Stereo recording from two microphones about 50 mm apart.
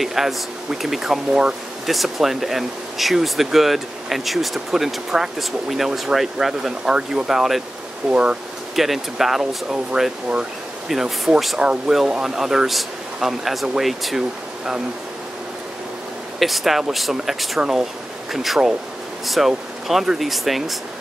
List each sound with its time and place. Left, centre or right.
0.0 s a man's voice: centre
8.1 s speech: right
8.7 s a man's voice: centre
16.3 s a man's voice: centre